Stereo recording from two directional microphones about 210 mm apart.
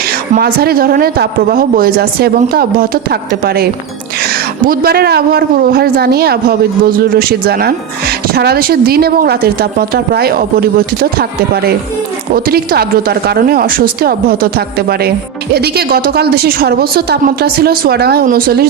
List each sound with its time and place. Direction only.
0.3 s speech: 45° right (ahead or behind)